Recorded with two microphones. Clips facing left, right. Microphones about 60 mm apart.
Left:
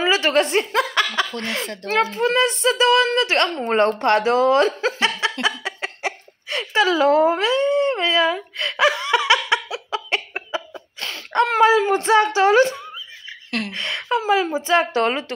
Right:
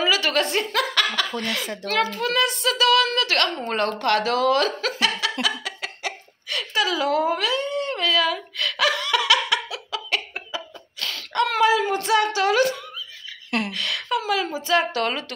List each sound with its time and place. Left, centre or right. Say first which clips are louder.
0.0 s a woman's voice: left 4 dB; left
1.3 s a woman's voice: even; centre
1.9 s a woman's voice: left 4 dB; left
5.2 s a sound: left 3 dB; left
8.5 s laughter: left 4 dB; left
13.7 s a woman's voice: left 2 dB; left